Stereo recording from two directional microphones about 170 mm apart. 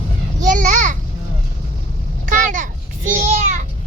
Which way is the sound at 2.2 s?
50° right (ahead or behind).